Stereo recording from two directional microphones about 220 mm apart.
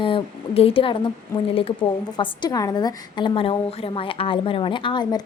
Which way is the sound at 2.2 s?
20° left (ahead or behind).